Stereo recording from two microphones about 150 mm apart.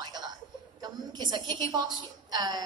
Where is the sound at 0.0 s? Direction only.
30° right (ahead or behind).